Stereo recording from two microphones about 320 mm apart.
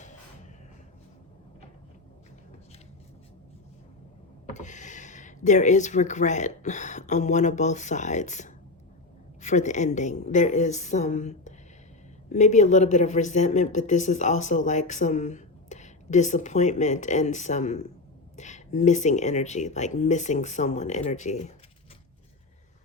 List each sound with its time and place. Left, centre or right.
4.5 s speech: left